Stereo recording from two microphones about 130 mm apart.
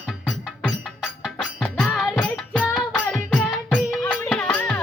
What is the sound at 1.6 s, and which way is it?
Music, 10° left (ahead or behind).